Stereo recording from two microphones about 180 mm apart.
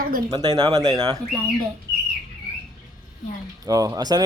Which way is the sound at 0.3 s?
20° right (ahead or behind).